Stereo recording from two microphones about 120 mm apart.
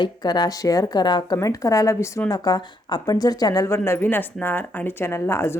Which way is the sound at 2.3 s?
35° left (ahead or behind).